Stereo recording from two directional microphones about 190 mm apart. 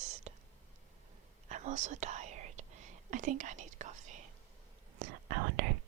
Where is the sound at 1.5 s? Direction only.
40° right (ahead or behind).